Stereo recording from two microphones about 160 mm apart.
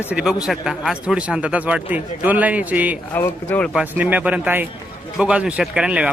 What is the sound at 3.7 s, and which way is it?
A man's voice, 10° right (ahead or behind).